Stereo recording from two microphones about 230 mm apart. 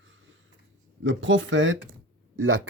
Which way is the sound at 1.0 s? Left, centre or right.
Right.